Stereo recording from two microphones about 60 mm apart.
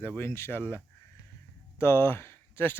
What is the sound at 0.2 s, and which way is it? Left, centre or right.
Speech, left.